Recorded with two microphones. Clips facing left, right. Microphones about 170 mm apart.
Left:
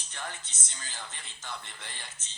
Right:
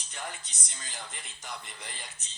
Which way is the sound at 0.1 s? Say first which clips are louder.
Even; 15° right (ahead or behind).